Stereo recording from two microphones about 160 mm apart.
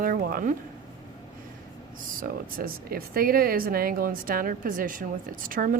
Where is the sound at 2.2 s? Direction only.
65° right (ahead or behind).